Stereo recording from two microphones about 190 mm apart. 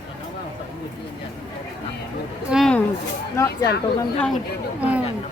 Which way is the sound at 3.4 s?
15° left (ahead or behind).